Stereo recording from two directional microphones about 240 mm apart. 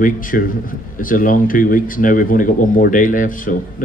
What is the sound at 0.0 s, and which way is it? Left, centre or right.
A man's voice, left.